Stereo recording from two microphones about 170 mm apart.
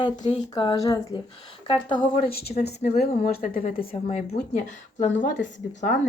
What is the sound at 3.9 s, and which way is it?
Speech, 35° left (ahead or behind).